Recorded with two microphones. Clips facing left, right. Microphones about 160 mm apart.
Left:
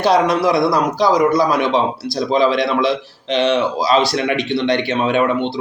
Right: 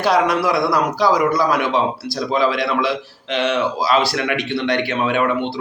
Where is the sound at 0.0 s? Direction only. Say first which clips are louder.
Left 2 dB; 25° left (ahead or behind).